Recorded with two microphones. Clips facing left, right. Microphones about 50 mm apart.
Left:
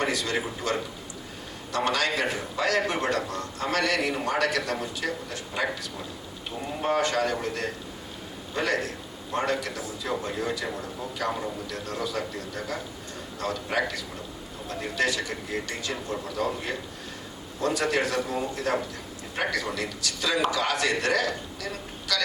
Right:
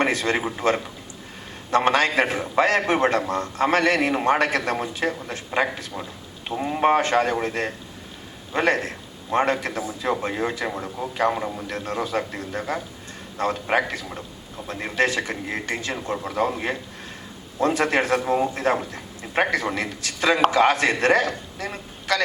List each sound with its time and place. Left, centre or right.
0.0 s a man's voice: right